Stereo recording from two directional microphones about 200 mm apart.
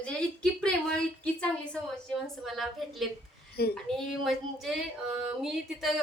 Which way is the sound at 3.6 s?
50° left (ahead or behind).